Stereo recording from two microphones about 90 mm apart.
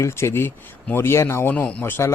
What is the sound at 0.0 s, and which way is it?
Speech, 30° left (ahead or behind).